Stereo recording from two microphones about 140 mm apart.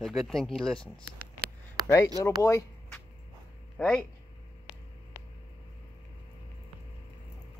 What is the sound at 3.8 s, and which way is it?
Speech, 5° left (ahead or behind).